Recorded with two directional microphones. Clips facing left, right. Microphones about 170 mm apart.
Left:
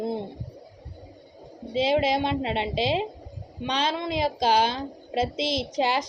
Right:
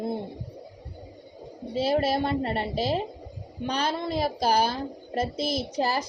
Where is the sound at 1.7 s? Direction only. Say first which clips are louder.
Left 2 dB; 90° left.